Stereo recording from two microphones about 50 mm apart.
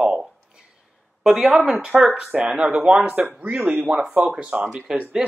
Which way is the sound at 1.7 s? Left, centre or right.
Centre.